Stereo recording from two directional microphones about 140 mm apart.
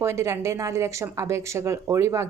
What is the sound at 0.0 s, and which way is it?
A woman's voice, 20° right (ahead or behind).